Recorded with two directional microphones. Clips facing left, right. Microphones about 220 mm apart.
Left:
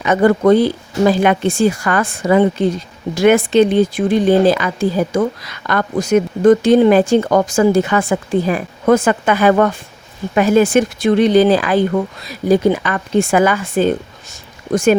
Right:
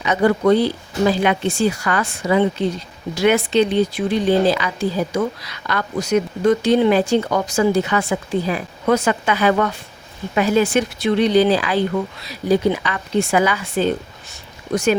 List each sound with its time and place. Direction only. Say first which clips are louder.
0.0 s speech: left 4 dB; 50° left (ahead or behind)